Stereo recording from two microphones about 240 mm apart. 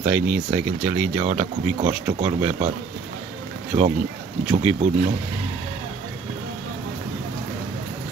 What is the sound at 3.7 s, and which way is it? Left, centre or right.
Speech, centre.